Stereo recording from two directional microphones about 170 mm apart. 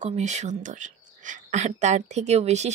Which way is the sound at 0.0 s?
45° right (ahead or behind).